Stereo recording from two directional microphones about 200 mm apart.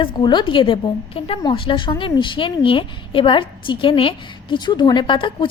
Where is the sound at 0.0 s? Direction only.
25° left (ahead or behind).